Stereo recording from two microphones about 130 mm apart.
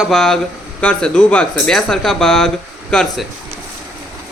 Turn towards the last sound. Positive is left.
turn(degrees=5)  # may be behind; listen again after turning